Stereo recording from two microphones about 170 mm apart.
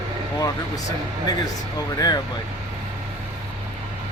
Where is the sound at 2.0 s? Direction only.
20° left (ahead or behind).